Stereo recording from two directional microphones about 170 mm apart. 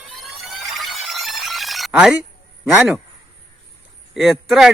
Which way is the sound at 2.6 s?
5° right (ahead or behind).